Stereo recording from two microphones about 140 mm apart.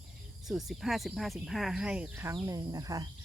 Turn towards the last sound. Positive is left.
turn(degrees=-25)  # may be behind; listen again after turning